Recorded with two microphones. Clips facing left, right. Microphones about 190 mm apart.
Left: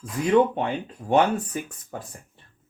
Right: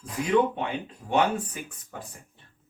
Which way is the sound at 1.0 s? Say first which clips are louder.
Left 4 dB; 45° left (ahead or behind).